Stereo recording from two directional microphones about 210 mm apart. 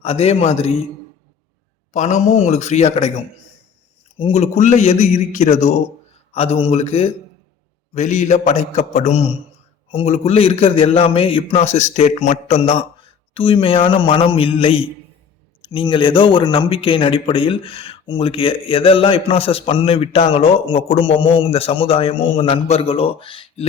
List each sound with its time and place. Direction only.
0.0 s speech: 30° left (ahead or behind)
1.9 s a man's voice: 35° left (ahead or behind)